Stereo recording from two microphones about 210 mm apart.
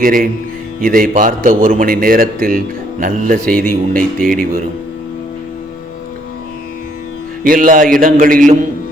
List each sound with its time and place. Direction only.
0.0 s a man's voice: 40° right (ahead or behind)
7.4 s a man's voice: 40° right (ahead or behind)